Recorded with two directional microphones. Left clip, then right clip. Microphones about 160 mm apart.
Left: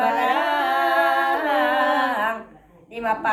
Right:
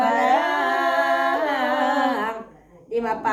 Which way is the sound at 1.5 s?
20° right (ahead or behind).